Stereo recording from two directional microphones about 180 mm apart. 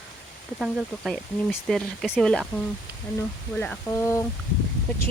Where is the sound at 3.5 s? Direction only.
10° left (ahead or behind).